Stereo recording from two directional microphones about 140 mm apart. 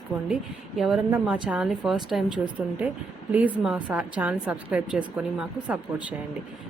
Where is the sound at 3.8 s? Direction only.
10° right (ahead or behind).